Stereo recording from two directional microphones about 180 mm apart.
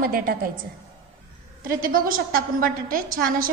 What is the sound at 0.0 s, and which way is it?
Speech, 55° right (ahead or behind).